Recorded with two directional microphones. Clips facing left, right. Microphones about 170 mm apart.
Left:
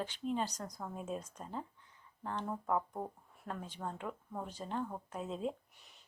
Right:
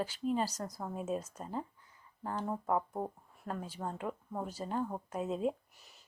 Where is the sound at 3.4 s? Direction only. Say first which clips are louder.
Right 3 dB; 5° right (ahead or behind).